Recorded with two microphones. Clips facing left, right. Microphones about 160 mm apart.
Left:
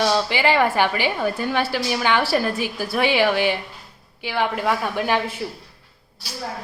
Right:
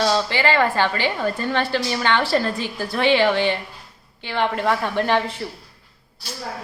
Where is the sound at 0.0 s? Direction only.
15° left (ahead or behind).